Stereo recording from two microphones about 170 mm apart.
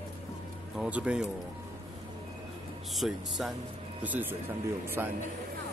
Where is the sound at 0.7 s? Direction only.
5° right (ahead or behind).